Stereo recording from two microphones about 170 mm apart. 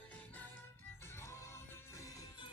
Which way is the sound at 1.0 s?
15° left (ahead or behind).